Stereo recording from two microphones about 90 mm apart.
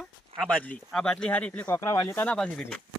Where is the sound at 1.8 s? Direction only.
35° left (ahead or behind).